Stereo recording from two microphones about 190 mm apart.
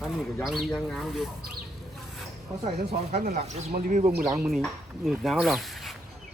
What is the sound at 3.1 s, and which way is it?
Speech, 45° right (ahead or behind).